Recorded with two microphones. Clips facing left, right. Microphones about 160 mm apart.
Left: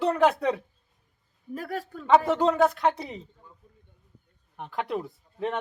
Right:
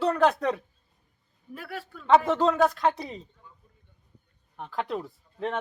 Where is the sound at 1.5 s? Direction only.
40° left (ahead or behind).